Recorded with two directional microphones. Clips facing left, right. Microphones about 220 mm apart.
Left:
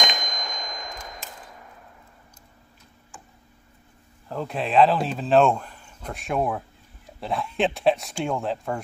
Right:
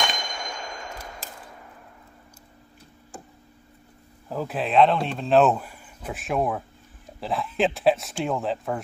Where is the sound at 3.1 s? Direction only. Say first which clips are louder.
Right 7 dB; 40° right (ahead or behind).